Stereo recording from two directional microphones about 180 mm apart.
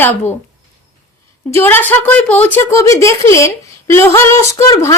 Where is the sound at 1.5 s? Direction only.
10° left (ahead or behind).